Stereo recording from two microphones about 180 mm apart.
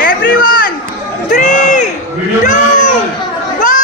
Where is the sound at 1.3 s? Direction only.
45° left (ahead or behind).